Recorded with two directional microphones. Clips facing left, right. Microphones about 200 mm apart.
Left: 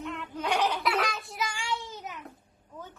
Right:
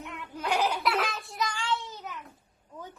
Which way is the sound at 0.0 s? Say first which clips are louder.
Left 3 dB; 10° right (ahead or behind).